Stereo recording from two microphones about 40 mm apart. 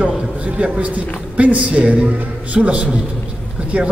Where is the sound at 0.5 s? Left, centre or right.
Right.